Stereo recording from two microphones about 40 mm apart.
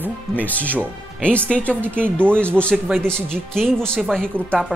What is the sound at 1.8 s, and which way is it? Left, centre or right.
Speech, right.